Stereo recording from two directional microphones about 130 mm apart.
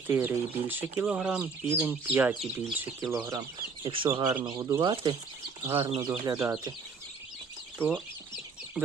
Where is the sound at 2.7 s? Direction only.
15° right (ahead or behind).